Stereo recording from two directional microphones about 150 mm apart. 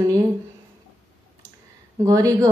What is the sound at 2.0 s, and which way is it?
Speech, 20° right (ahead or behind).